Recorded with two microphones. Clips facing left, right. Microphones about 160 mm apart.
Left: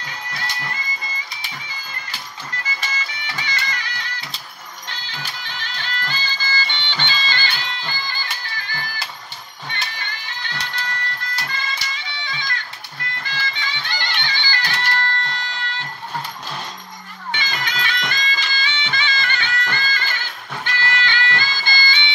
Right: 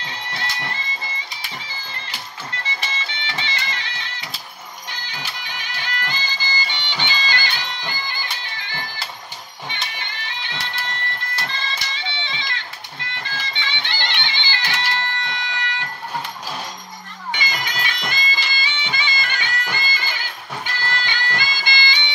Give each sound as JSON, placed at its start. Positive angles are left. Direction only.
{"t": 0.0, "sound": "music", "side_deg": -25}
{"t": 2.6, "sound": "music", "side_deg": -30}
{"t": 4.8, "sound": "music", "side_deg": -10}
{"t": 11.4, "sound": "bagpipes", "side_deg": -25}
{"t": 13.2, "sound": "music", "side_deg": -25}
{"t": 17.3, "sound": "music", "side_deg": -10}